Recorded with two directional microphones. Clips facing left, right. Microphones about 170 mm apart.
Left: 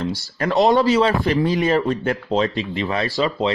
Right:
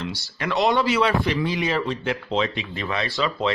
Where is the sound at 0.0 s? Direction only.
40° left (ahead or behind).